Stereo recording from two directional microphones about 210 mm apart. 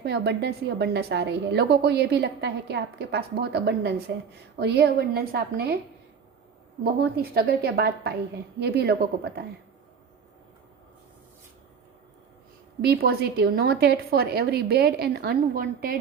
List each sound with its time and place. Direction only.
0.0 s a woman's voice: 55° right (ahead or behind)
6.8 s a woman's voice: 45° right (ahead or behind)
12.8 s a woman's voice: 45° right (ahead or behind)